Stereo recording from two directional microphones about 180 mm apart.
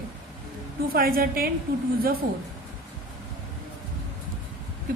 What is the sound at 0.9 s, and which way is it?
Speech, 55° right (ahead or behind).